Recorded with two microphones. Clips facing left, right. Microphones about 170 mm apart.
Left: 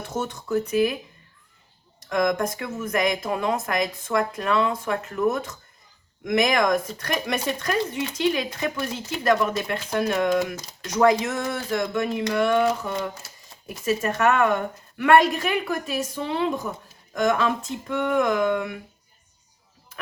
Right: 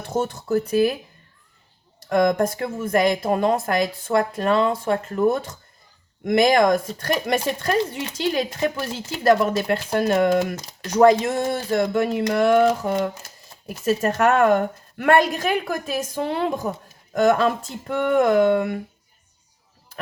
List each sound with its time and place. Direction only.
0.2 s speech: 35° right (ahead or behind)
2.1 s speech: 35° right (ahead or behind)
12.3 s a sound: 45° right (ahead or behind)
13.8 s speech: 35° right (ahead or behind)